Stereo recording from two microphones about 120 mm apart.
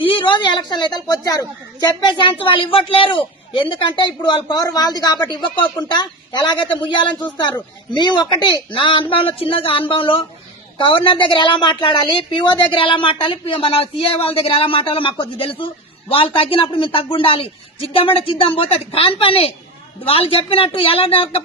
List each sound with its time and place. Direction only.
0.0 s a woman's voice: 45° left (ahead or behind)